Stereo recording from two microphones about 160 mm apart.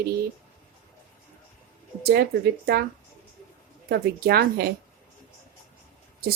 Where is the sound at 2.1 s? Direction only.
75° right (ahead or behind).